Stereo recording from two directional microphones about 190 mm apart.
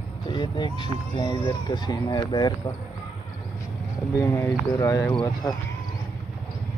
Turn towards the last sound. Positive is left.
turn(degrees=20)  # may be behind; listen again after turning